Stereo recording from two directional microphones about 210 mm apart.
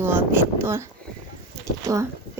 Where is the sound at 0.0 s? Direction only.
10° right (ahead or behind).